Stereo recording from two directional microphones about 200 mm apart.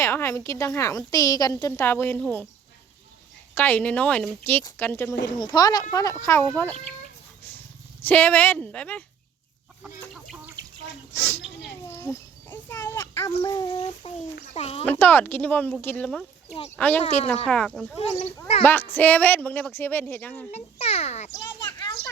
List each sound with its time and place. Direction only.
0.0 s a woman's voice: 10° left (ahead or behind)
3.5 s a woman's voice: 10° left (ahead or behind)
8.0 s a woman's voice: 10° left (ahead or behind)
10.3 s water: 10° right (ahead or behind)
11.9 s a sound: 10° left (ahead or behind)
14.5 s a child's voice: 30° left (ahead or behind)
14.8 s a woman's voice: 10° left (ahead or behind)
17.9 s a child's voice: 30° left (ahead or behind)
18.6 s a woman's voice: 10° left (ahead or behind)
20.5 s a child's voice: 30° left (ahead or behind)
21.8 s speech: 20° left (ahead or behind)